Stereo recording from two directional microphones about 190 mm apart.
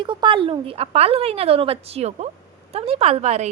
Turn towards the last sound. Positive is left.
turn(degrees=-35)  # may be behind; listen again after turning